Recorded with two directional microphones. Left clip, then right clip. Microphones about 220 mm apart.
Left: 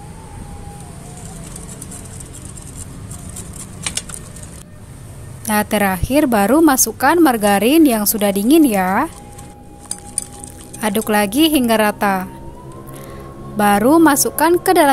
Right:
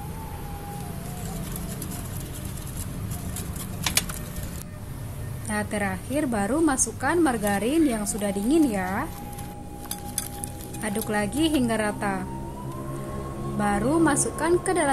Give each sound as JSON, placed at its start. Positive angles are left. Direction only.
{"t": 5.5, "sound": "a woman's voice", "side_deg": 50}
{"t": 10.8, "sound": "a woman's voice", "side_deg": 45}
{"t": 13.6, "sound": "a woman's voice", "side_deg": 45}